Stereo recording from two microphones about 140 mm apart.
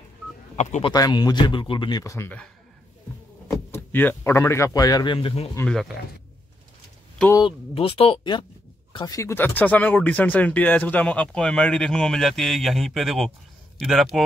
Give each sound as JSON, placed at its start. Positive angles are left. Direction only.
{"t": 0.6, "sound": "speech", "side_deg": 55}
{"t": 0.8, "sound": "speech", "side_deg": 30}
{"t": 2.1, "sound": "speech", "side_deg": 15}
{"t": 3.7, "sound": "speech", "side_deg": 15}
{"t": 5.7, "sound": "speech", "side_deg": 0}
{"t": 7.7, "sound": "speech", "side_deg": 40}